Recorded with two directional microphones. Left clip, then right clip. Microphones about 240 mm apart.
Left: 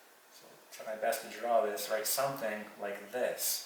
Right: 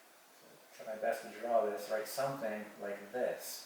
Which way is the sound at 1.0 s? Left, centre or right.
Centre.